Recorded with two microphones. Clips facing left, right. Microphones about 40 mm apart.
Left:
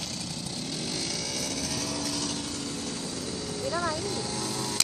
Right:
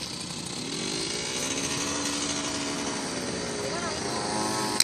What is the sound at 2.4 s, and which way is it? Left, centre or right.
Light engine, right.